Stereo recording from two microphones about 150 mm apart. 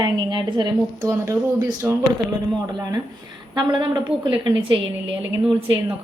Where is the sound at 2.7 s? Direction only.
25° right (ahead or behind).